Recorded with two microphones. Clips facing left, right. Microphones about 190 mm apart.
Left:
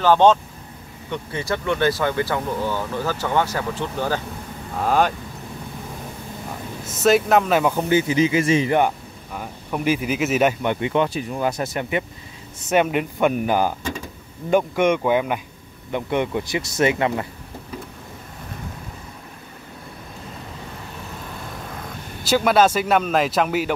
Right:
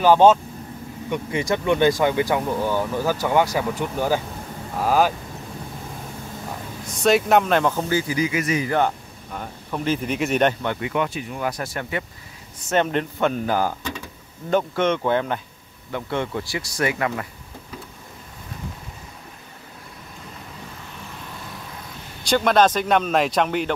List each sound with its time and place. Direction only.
0.0 s speech: 10° right (ahead or behind)
7.0 s speech: centre (ahead or behind)
7.9 s speech: 20° left (ahead or behind)
9.3 s speech: 10° left (ahead or behind)
10.6 s speech: 20° left (ahead or behind)
22.2 s speech: 5° left (ahead or behind)